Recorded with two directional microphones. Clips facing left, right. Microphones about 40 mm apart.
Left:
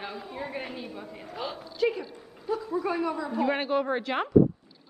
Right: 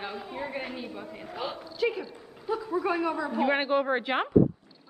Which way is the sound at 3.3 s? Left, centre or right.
Centre.